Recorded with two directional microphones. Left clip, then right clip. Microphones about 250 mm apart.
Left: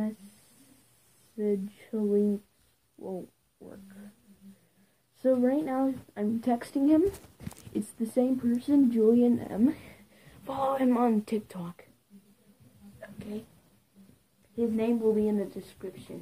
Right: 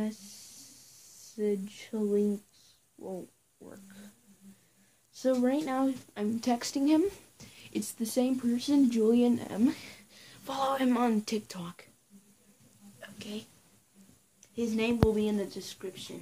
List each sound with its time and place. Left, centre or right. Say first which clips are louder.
1.4 s speech: left 1 dB; centre
5.2 s speech: left 3 dB; centre
13.0 s a sound: left 1 dB; centre
14.5 s speech: left 2 dB; centre